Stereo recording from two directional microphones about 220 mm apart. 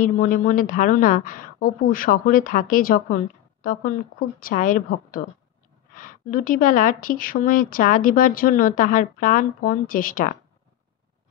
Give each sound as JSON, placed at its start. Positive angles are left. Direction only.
{"t": 0.0, "sound": "a woman's voice", "side_deg": 35}